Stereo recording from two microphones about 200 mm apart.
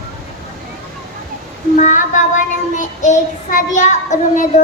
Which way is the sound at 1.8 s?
40° left (ahead or behind).